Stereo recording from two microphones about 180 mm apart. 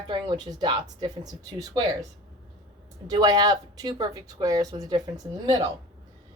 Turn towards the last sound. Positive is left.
turn(degrees=-20)  # may be behind; listen again after turning